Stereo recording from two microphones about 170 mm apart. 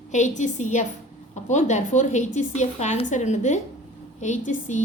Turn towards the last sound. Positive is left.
turn(degrees=45)  # may be behind; listen again after turning